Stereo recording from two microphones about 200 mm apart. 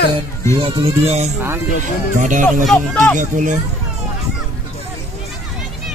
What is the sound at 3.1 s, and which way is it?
Speech, 40° right (ahead or behind).